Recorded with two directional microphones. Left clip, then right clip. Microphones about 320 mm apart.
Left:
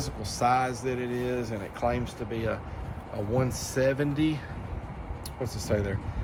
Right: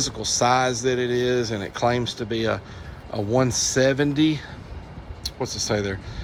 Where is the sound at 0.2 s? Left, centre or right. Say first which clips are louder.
Right 5 dB; centre.